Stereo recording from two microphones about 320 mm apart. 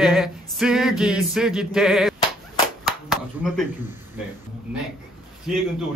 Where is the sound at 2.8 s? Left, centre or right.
Centre.